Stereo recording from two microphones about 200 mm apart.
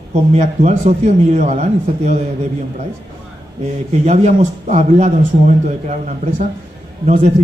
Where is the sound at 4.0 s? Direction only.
35° right (ahead or behind).